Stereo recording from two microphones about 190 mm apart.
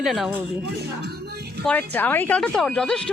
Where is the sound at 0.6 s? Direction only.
60° right (ahead or behind).